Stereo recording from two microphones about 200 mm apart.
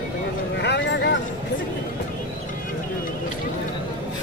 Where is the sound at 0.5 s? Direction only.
60° left (ahead or behind).